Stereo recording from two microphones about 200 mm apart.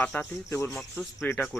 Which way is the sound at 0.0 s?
10° left (ahead or behind).